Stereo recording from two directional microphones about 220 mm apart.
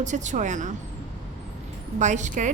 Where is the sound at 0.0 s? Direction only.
35° right (ahead or behind).